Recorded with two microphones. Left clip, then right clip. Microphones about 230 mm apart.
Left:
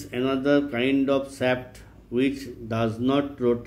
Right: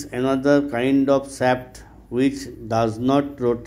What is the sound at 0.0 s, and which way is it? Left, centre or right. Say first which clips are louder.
Speech: right 4 dB; centre.